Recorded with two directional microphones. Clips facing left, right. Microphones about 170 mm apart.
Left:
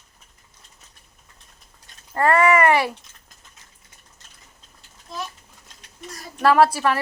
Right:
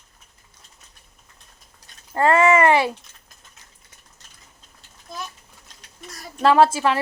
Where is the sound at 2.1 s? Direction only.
25° right (ahead or behind).